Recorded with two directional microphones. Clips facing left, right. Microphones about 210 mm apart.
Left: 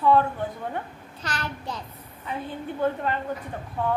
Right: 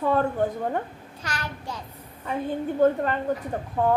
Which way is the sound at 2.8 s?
45° right (ahead or behind).